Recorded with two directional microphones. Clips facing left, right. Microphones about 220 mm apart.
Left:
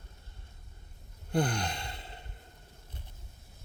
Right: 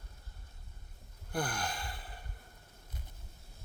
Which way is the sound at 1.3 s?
25° left (ahead or behind).